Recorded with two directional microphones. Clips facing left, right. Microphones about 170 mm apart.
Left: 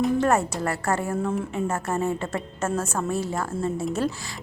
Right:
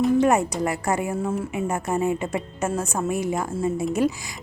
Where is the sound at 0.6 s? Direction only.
15° right (ahead or behind).